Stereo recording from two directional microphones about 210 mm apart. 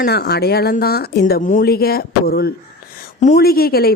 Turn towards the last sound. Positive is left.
turn(degrees=45)  # may be behind; listen again after turning